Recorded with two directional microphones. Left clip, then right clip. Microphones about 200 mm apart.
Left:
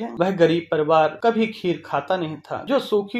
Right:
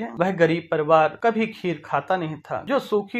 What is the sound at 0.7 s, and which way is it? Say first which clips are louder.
Speech: even; 20° right (ahead or behind).